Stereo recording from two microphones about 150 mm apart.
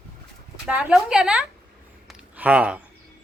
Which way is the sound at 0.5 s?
5° right (ahead or behind).